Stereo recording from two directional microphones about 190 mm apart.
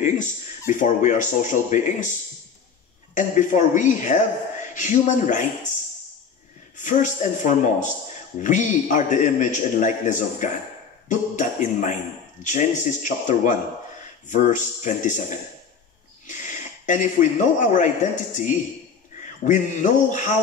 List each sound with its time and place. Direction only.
0.0 s a man's voice: 40° left (ahead or behind)
3.2 s a man's voice: 40° left (ahead or behind)
6.8 s a man's voice: 40° left (ahead or behind)